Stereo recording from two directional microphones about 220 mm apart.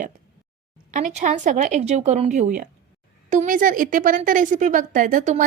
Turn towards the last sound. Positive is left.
turn(degrees=-35)  # may be behind; listen again after turning